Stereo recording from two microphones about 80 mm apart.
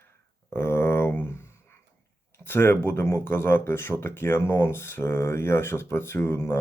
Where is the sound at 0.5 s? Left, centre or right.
Left.